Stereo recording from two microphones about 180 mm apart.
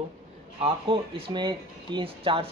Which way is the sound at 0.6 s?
30° right (ahead or behind).